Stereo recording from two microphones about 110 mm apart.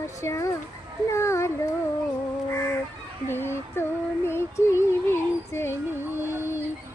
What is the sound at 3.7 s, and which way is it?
Female singing, 20° left (ahead or behind).